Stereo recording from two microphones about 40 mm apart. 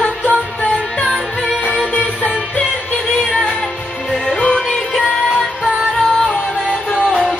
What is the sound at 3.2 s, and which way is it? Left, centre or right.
Music, centre.